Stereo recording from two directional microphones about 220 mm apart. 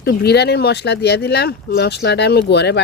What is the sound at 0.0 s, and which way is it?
Speech, 45° left (ahead or behind).